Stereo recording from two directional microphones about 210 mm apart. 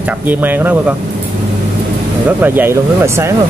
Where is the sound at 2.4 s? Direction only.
10° right (ahead or behind).